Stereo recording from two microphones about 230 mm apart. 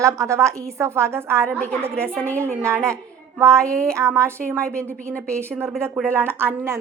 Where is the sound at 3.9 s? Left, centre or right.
Centre.